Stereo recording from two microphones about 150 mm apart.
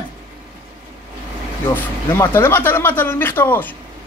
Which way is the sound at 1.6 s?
15° left (ahead or behind).